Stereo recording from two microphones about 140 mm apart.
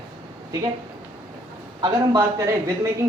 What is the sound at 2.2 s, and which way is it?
Speech, 25° right (ahead or behind).